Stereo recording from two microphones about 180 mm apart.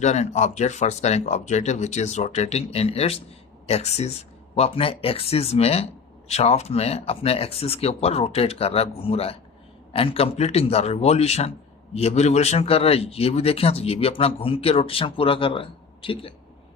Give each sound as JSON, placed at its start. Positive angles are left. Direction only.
{"t": 0.0, "sound": "speech", "side_deg": 40}